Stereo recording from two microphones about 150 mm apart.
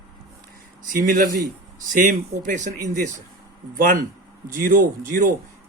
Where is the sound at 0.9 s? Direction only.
70° right (ahead or behind).